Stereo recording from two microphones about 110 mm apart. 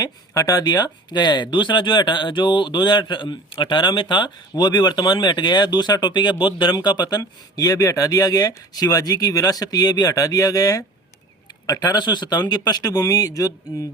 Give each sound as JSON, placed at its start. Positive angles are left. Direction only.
{"t": 0.0, "sound": "speech", "side_deg": 35}